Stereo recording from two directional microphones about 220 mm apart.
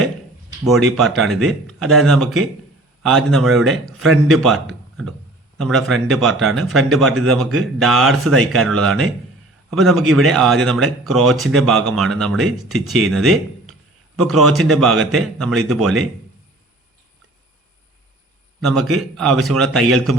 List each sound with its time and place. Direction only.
0.6 s speech: centre (ahead or behind)
18.6 s speech: centre (ahead or behind)